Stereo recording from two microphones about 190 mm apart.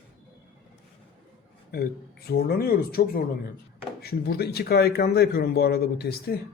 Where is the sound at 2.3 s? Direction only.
55° left (ahead or behind).